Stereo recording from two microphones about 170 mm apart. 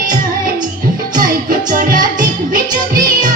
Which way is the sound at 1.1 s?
55° right (ahead or behind).